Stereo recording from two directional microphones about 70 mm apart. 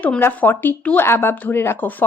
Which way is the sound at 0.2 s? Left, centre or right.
Left.